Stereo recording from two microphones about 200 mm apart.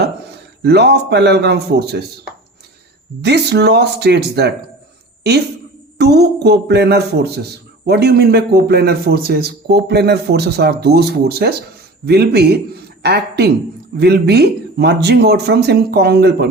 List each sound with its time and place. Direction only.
0.6 s speech: 55° right (ahead or behind)
3.2 s speech: 55° right (ahead or behind)
6.0 s a man's voice: 55° right (ahead or behind)